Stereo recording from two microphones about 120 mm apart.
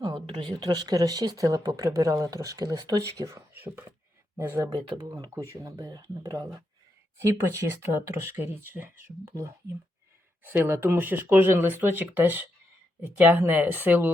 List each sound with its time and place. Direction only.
0.0 s speech: 40° right (ahead or behind); by 4.7 s 20° right (ahead or behind)
4.9 s speech: 35° right (ahead or behind); by 14.1 s 15° right (ahead or behind)